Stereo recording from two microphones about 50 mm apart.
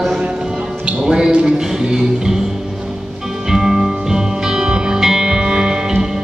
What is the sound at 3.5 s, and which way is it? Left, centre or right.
Music, centre.